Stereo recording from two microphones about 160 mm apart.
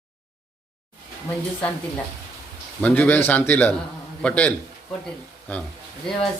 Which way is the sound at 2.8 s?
10° left (ahead or behind).